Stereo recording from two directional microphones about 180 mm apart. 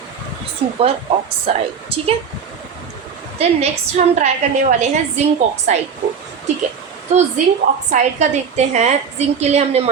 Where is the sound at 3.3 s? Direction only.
35° right (ahead or behind).